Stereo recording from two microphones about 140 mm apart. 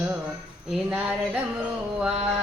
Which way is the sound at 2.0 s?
5° right (ahead or behind).